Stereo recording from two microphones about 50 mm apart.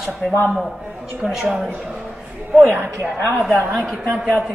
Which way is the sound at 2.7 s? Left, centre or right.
Right.